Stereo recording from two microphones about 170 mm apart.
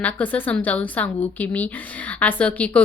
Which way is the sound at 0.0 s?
10° left (ahead or behind).